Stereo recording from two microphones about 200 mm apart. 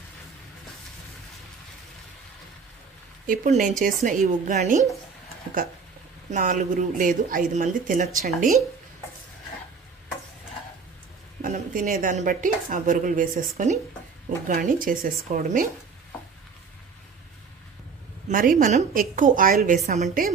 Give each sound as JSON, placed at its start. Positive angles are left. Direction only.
{"t": 3.2, "sound": "speech", "side_deg": -40}
{"t": 6.3, "sound": "speech", "side_deg": -40}
{"t": 11.4, "sound": "speech", "side_deg": -40}
{"t": 18.3, "sound": "speech", "side_deg": -45}